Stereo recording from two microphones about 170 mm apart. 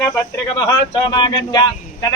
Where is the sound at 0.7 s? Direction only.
25° left (ahead or behind).